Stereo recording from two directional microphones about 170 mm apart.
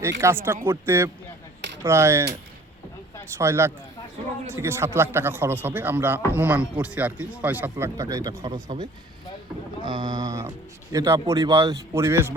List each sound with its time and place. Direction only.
0.2 s a man's voice: 15° right (ahead or behind)
3.3 s a man's voice: 15° right (ahead or behind)